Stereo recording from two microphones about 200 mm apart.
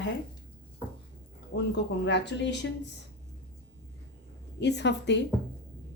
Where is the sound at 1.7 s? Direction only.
60° left (ahead or behind).